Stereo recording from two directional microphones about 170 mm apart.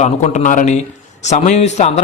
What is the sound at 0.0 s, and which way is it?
A man's voice, 45° left (ahead or behind).